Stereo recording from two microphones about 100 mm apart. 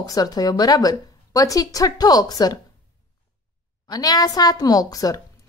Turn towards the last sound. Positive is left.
turn(degrees=40)  # may be behind; listen again after turning